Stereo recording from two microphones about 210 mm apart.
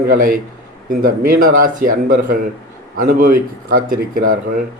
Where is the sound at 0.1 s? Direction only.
40° right (ahead or behind).